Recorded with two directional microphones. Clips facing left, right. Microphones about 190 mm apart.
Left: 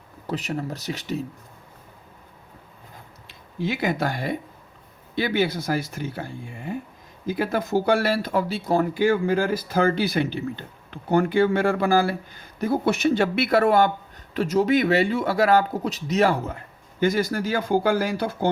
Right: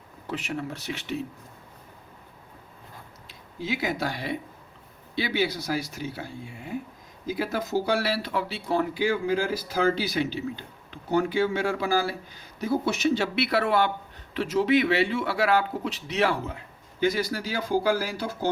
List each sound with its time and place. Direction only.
0.3 s speech: 40° left (ahead or behind)
3.2 s speech: 55° left (ahead or behind)